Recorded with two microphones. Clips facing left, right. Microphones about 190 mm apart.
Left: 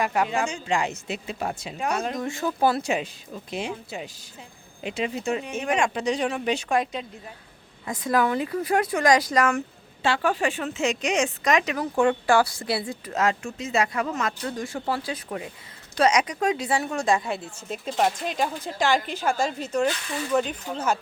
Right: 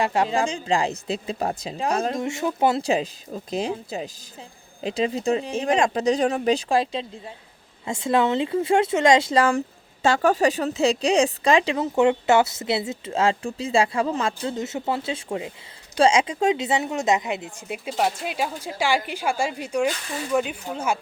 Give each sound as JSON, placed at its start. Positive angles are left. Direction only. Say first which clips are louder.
{"t": 0.0, "sound": "speech", "louder": "right 3 dB", "side_deg": -30}
{"t": 2.9, "sound": "a woman's voice", "louder": "right 4 dB", "side_deg": -35}
{"t": 10.0, "sound": "a woman's voice", "louder": "right 5 dB", "side_deg": -45}